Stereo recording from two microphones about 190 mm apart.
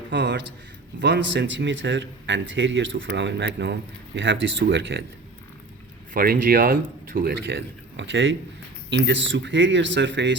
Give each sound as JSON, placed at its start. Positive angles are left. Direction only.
{"t": 0.1, "sound": "speech", "side_deg": -65}
{"t": 6.1, "sound": "speech", "side_deg": -50}
{"t": 7.4, "sound": "speech", "side_deg": -70}